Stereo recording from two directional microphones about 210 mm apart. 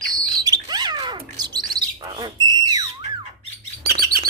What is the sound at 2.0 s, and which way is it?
Whistle, 20° right (ahead or behind).